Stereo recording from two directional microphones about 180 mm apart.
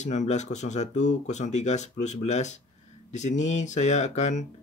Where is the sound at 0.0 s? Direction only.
40° left (ahead or behind).